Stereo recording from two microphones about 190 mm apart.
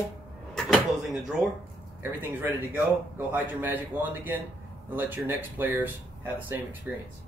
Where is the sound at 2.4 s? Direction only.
10° right (ahead or behind).